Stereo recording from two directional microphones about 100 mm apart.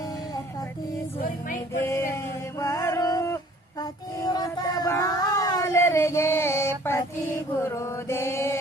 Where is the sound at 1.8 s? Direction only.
25° left (ahead or behind).